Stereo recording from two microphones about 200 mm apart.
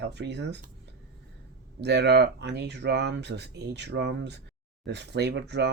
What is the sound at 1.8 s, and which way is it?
Speech, 55° right (ahead or behind).